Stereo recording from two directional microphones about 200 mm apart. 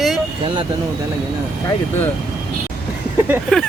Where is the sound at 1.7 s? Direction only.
10° left (ahead or behind).